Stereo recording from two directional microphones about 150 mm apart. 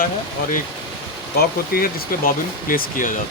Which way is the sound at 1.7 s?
75° left (ahead or behind).